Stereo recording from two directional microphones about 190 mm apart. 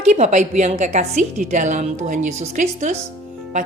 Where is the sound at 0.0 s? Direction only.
40° right (ahead or behind).